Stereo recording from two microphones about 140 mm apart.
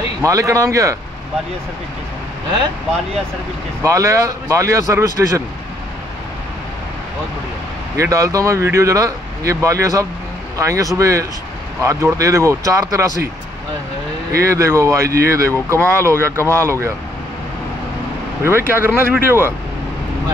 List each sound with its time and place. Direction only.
0.2 s speech: 20° right (ahead or behind)
3.8 s speech: 20° right (ahead or behind)
8.0 s speech: 25° right (ahead or behind)
14.3 s speech: 20° right (ahead or behind)
18.8 s speech: 15° right (ahead or behind)